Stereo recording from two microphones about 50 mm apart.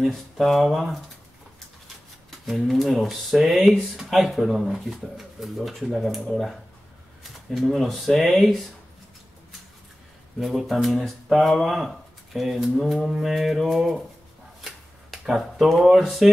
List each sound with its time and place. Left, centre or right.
0.0 s speech: centre
2.4 s speech: centre
10.4 s speech: centre
14.6 s a sound: centre